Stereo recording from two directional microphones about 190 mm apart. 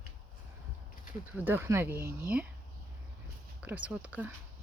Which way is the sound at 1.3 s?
10° right (ahead or behind).